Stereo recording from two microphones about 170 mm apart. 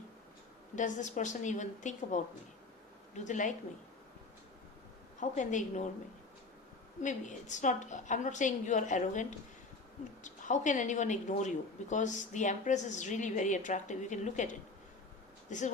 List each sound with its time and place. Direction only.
0.8 s speech: 45° left (ahead or behind)
3.2 s speech: 45° left (ahead or behind)
5.2 s speech: 45° left (ahead or behind)
7.0 s speech: 45° left (ahead or behind)